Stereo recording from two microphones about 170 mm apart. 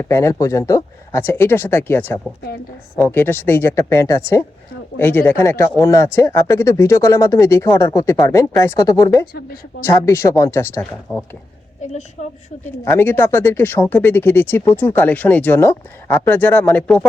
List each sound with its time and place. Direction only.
0.0 s speech: 15° left (ahead or behind)
12.2 s a woman's voice: 45° left (ahead or behind)
12.8 s speech: 15° left (ahead or behind)